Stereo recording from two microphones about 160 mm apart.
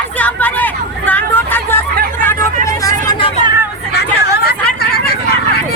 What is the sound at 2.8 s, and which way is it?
Vehicle, 20° left (ahead or behind).